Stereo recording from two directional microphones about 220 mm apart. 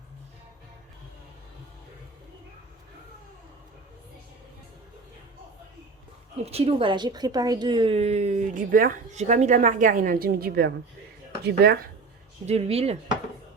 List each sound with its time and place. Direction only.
6.4 s a woman's voice: 25° right (ahead or behind); by 11.8 s 45° right (ahead or behind)
12.5 s speech: 30° right (ahead or behind)